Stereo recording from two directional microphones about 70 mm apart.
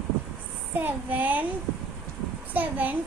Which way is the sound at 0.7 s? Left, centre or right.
Right.